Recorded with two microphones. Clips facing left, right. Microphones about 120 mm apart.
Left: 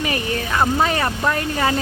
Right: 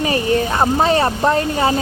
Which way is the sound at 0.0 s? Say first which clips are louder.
Right 7 dB; 30° right (ahead or behind).